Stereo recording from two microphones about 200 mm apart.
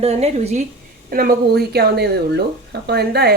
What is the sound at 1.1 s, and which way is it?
A woman's voice, 50° right (ahead or behind).